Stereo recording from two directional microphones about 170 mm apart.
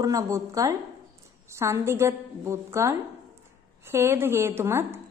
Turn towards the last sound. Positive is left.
turn(degrees=-15)  # may be behind; listen again after turning